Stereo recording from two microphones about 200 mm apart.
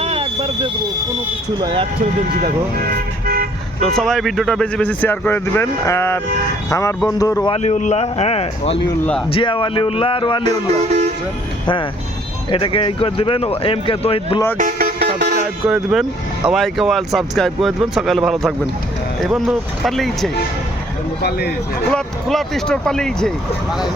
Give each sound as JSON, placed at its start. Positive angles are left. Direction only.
{"t": 0.0, "sound": "a sound", "side_deg": -30}
{"t": 1.6, "sound": "speech", "side_deg": -25}
{"t": 3.9, "sound": "speech", "side_deg": 0}
{"t": 7.5, "sound": "speech", "side_deg": 35}
{"t": 8.9, "sound": "speech", "side_deg": 5}
{"t": 9.3, "sound": "speech", "side_deg": 25}
{"t": 10.7, "sound": "speech", "side_deg": -35}
{"t": 12.5, "sound": "speech", "side_deg": 25}
{"t": 14.6, "sound": "music", "side_deg": -50}
{"t": 15.6, "sound": "speech", "side_deg": -5}
{"t": 21.2, "sound": "speech", "side_deg": 55}
{"t": 21.8, "sound": "speech", "side_deg": 0}